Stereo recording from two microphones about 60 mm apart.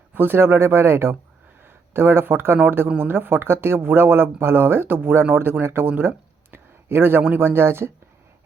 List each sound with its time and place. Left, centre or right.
0.1 s speech: right